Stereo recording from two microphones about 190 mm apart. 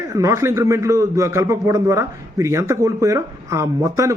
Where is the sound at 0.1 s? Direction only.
15° right (ahead or behind).